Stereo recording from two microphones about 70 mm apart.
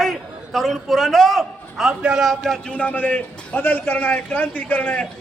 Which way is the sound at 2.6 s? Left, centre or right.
Left.